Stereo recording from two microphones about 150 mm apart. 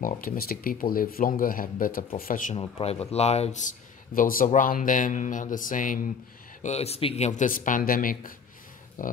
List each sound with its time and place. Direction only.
0.0 s speech: 75° left (ahead or behind)
2.5 s speech: 40° left (ahead or behind); by 5.9 s 60° left (ahead or behind)
6.6 s speech: 45° left (ahead or behind); by 9.1 s 60° left (ahead or behind)